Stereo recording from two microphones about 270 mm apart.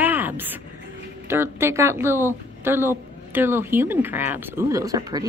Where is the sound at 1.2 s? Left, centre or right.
Centre.